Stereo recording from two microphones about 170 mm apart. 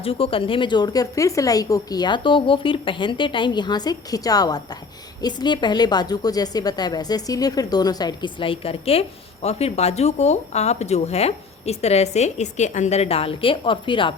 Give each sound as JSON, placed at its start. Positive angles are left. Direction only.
{"t": 0.0, "sound": "a woman's voice", "side_deg": 35}